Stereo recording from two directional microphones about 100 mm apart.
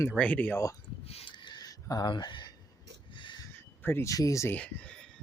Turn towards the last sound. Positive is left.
turn(degrees=10)  # may be behind; listen again after turning